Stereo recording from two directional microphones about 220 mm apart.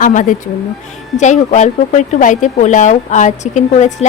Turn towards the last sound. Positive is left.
turn(degrees=30)  # may be behind; listen again after turning